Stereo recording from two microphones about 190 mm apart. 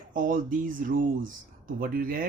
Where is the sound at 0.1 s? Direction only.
45° right (ahead or behind).